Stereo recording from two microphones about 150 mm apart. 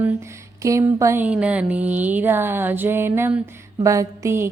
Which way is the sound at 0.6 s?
20° right (ahead or behind).